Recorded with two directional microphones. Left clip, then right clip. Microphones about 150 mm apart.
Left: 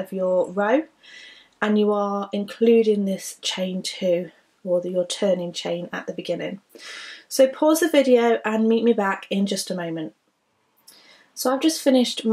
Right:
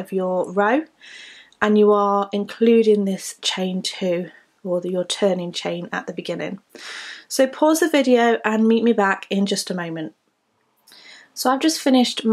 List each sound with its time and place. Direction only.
0.2 s speech: 40° right (ahead or behind)
1.8 s speech: 30° right (ahead or behind)
11.4 s speech: 35° right (ahead or behind)